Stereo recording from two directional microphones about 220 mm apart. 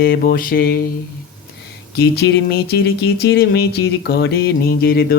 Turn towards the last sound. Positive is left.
turn(degrees=45)  # may be behind; listen again after turning